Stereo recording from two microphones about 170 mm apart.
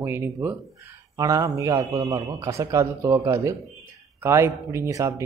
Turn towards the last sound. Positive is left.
turn(degrees=-15)  # may be behind; listen again after turning